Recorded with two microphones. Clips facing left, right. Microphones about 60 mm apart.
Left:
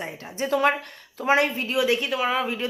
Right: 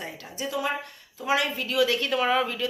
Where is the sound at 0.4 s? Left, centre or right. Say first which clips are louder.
Left 7 dB; left.